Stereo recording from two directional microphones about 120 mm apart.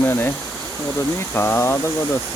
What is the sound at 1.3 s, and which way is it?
Speech, 20° left (ahead or behind).